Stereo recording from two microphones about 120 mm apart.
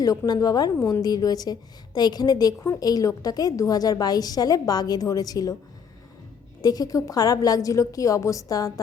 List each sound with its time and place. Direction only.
0.3 s a woman's voice: 35° left (ahead or behind)
6.6 s a woman's voice: 30° left (ahead or behind)